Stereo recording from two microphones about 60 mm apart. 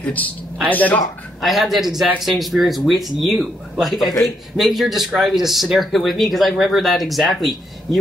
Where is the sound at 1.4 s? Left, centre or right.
Centre.